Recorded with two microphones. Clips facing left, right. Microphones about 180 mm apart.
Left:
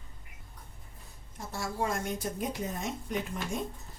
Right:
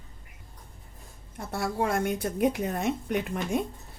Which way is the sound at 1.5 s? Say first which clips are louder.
Right 5 dB; 60° right (ahead or behind).